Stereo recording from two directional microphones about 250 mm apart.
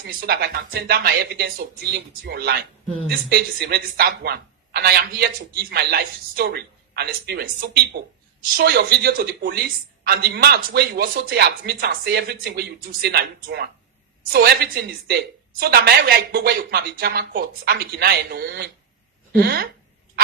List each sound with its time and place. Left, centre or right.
0.2 s a woman's voice: right
8.5 s a woman's voice: right